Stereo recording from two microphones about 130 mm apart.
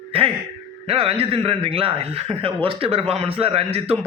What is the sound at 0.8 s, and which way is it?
Speech, 50° right (ahead or behind).